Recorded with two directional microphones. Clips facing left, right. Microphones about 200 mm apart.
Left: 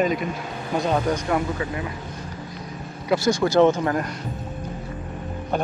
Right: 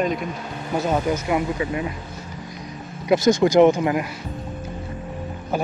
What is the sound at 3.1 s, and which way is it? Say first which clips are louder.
Speech: right 4 dB; 20° right (ahead or behind).